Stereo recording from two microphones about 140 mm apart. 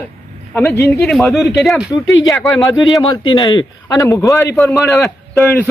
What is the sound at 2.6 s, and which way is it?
A man's voice, 25° left (ahead or behind).